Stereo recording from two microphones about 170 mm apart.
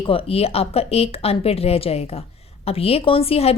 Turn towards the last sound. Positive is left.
turn(degrees=35)  # may be behind; listen again after turning